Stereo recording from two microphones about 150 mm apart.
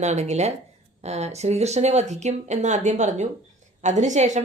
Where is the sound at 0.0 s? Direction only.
50° right (ahead or behind).